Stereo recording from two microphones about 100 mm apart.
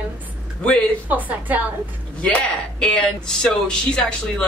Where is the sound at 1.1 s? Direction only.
15° right (ahead or behind).